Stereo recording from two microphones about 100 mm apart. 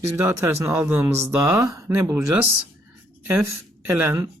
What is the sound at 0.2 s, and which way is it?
Speech, 30° right (ahead or behind).